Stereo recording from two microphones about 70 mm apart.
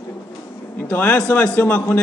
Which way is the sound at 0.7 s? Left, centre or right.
Left.